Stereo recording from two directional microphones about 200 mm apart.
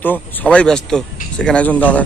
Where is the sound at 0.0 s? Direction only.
10° left (ahead or behind).